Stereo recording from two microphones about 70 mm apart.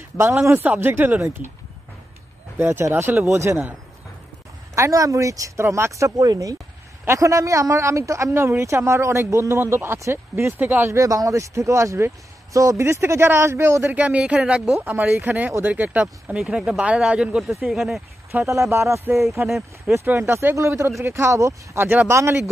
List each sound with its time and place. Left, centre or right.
0.2 s speech: right
2.6 s speech: right
4.7 s speech: right
7.1 s speech: right
10.6 s speech: right
10.9 s speech: right
13.9 s speech: centre
14.8 s speech: right
16.3 s speech: centre
17.4 s speech: centre
18.5 s speech: right
21.7 s speech: right